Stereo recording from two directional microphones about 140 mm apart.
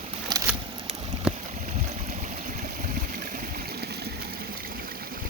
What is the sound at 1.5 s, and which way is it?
Stream, 55° right (ahead or behind).